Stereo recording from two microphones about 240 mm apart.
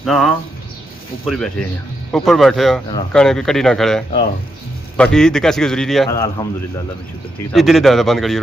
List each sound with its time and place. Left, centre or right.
0.0 s a man's voice: centre
6.1 s a man's voice: centre
7.5 s a man's voice: centre